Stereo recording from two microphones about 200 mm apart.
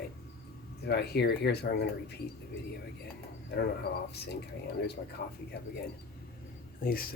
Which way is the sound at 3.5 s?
55° left (ahead or behind).